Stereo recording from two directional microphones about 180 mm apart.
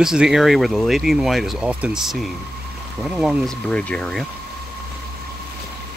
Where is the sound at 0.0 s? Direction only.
5° right (ahead or behind).